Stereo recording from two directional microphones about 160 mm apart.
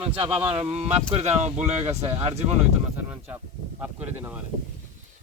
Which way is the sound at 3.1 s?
10° right (ahead or behind).